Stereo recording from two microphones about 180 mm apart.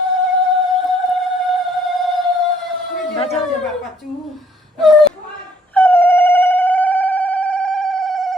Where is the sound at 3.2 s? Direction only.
35° left (ahead or behind).